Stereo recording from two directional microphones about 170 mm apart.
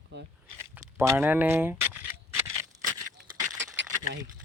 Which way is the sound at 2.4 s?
20° right (ahead or behind).